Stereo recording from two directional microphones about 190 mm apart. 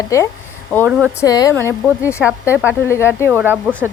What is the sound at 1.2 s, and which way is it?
Speech, 20° left (ahead or behind).